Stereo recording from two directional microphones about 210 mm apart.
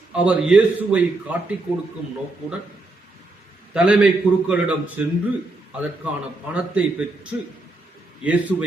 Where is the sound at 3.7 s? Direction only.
5° right (ahead or behind).